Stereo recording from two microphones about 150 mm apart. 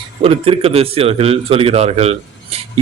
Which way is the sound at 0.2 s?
40° right (ahead or behind).